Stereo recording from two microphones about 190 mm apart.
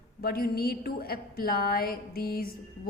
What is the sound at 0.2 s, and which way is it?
A woman's voice, 55° left (ahead or behind).